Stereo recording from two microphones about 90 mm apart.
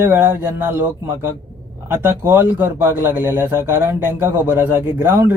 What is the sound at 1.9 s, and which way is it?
A man's voice, 25° right (ahead or behind).